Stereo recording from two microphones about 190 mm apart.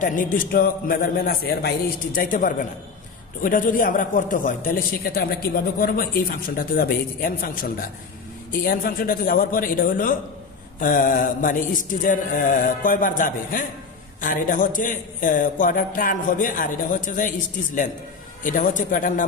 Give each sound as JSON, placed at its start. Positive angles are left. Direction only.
{"t": 0.0, "sound": "speech", "side_deg": 45}
{"t": 18.4, "sound": "speech", "side_deg": 45}